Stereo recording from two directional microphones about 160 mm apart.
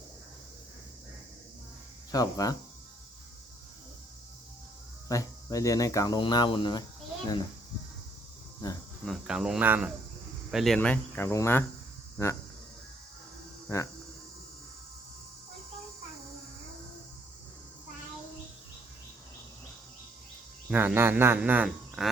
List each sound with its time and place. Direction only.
2.1 s speech: 20° left (ahead or behind)
5.0 s speech: 20° left (ahead or behind)
9.0 s speech: centre (ahead or behind)
10.5 s speech: centre (ahead or behind)
10.8 s cricket: 10° left (ahead or behind)
12.1 s speech: 15° left (ahead or behind)
13.7 s speech: 20° left (ahead or behind)
20.7 s speech: 10° right (ahead or behind)